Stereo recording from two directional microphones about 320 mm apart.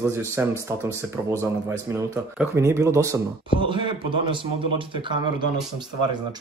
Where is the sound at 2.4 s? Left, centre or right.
Centre.